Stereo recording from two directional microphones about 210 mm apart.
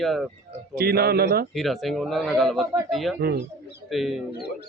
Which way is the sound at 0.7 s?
45° right (ahead or behind).